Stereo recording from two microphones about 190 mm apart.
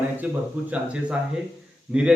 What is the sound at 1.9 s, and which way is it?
Speech, 5° right (ahead or behind).